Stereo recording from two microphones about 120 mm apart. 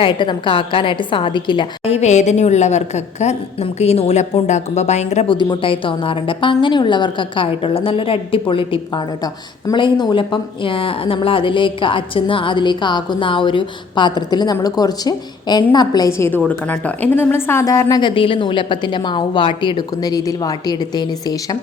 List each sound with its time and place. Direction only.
0.0 s a woman's voice: 45° left (ahead or behind); by 5.2 s 70° left (ahead or behind)
5.3 s a woman's voice: 40° left (ahead or behind); by 16.4 s 20° left (ahead or behind)
16.5 s a woman's voice: 10° left (ahead or behind); by 18.1 s 30° left (ahead or behind)
18.1 s a woman's voice: 45° left (ahead or behind)